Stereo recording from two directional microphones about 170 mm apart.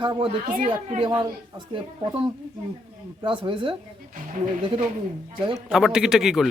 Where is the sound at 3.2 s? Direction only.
30° right (ahead or behind).